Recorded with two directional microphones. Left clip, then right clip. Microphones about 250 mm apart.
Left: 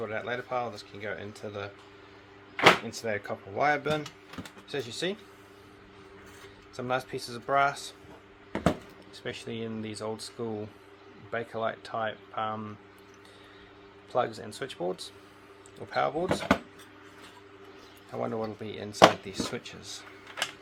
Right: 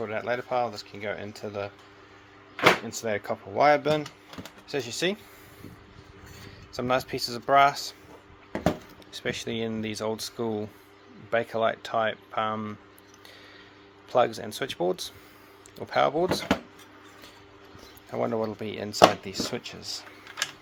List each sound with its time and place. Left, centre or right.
0.0 s speech: right
6.7 s speech: right
9.1 s speech: right
14.1 s speech: right
16.3 s speech: centre
18.1 s speech: right